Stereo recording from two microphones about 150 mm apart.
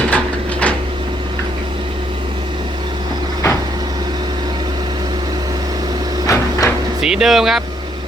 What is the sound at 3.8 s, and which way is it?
Vehicle, 25° right (ahead or behind).